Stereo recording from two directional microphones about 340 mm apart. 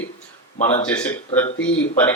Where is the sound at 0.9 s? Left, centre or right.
Centre.